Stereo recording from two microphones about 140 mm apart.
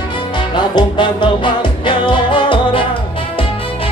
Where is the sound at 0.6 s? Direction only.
35° left (ahead or behind).